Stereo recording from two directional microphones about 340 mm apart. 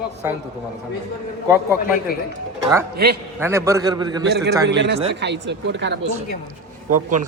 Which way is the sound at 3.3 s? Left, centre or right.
Centre.